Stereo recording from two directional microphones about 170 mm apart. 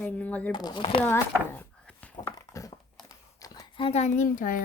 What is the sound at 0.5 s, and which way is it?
Speech, 25° left (ahead or behind).